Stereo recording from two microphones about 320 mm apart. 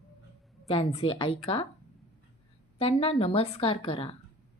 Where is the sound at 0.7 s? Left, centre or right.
Centre.